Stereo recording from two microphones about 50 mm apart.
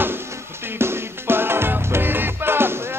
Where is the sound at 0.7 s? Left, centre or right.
Right.